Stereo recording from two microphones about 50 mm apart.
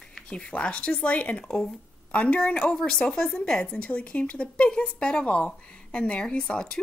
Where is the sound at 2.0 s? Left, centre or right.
Left.